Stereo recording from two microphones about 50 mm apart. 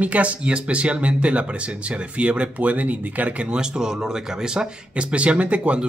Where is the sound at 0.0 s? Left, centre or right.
Right.